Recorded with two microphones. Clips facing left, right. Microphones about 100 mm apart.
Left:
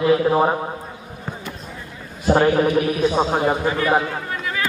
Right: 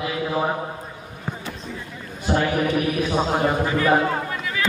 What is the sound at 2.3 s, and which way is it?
Speech, 40° left (ahead or behind).